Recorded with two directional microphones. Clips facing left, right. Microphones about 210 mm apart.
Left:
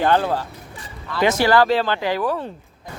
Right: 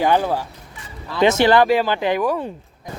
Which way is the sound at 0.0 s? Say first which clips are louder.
Right 1 dB; 10° right (ahead or behind).